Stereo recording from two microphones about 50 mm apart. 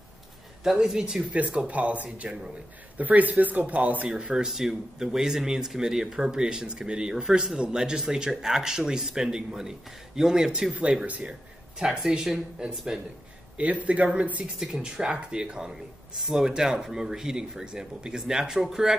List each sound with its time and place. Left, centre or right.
0.7 s speech: centre
1.7 s speech: right
4.1 s speech: centre
10.7 s speech: right
11.8 s speech: centre
13.6 s speech: right
14.6 s speech: centre